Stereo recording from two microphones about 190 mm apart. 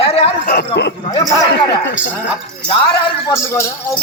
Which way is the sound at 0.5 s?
60° left (ahead or behind).